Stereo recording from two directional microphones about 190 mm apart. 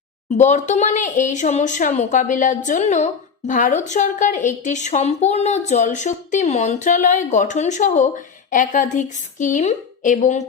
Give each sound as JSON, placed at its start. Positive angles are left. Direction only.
{"t": 0.3, "sound": "speech", "side_deg": 40}